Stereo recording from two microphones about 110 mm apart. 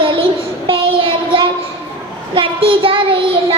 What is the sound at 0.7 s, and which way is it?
Child singing, 50° right (ahead or behind).